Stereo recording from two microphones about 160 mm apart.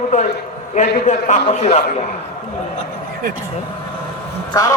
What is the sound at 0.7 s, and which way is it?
A man's voice, 50° left (ahead or behind).